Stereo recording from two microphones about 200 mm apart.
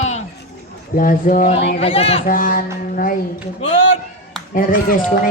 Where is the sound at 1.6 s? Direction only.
30° left (ahead or behind).